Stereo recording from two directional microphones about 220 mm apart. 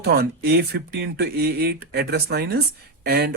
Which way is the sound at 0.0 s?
45° right (ahead or behind).